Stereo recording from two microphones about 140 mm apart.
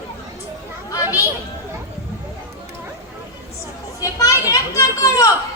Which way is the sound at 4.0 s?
25° left (ahead or behind).